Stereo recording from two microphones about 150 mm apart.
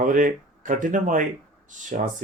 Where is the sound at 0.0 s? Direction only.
60° right (ahead or behind).